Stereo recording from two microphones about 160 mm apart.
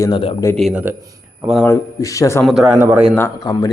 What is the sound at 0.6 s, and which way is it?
Speech, centre (ahead or behind).